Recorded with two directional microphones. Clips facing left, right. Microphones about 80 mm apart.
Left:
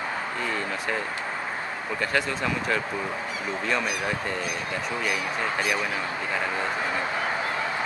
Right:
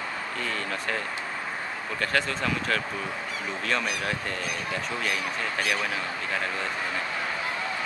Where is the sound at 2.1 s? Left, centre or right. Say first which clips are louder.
Even; centre.